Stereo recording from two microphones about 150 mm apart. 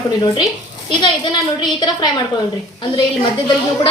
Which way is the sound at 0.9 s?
35° left (ahead or behind).